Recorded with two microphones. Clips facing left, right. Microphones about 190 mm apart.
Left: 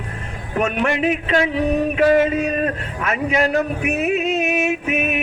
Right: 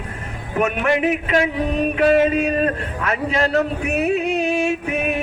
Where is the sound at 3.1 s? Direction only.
15° left (ahead or behind).